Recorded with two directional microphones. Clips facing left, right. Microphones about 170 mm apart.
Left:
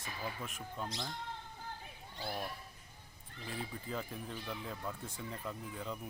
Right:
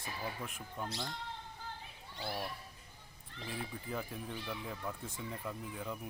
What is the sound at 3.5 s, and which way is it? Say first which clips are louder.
Speech: even; 10° right (ahead or behind).